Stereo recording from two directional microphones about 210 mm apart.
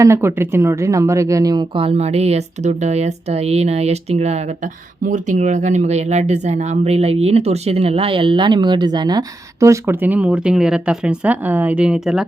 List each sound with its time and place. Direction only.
0.0 s speech: 15° right (ahead or behind)